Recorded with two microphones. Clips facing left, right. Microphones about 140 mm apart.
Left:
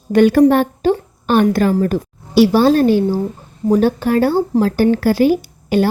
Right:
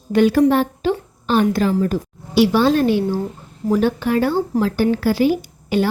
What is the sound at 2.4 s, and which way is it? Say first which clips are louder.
Speech: left 4 dB; 40° left (ahead or behind).